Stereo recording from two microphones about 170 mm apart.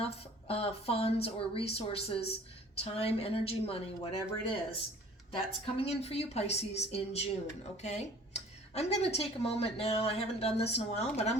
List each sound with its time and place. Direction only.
0.0 s speech: 35° left (ahead or behind)